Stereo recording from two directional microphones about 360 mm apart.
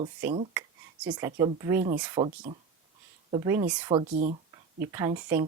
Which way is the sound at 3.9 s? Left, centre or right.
Centre.